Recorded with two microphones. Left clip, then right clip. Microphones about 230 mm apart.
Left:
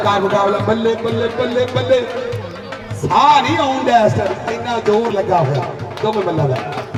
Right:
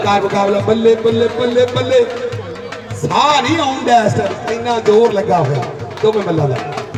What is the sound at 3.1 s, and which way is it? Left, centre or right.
Speech, right.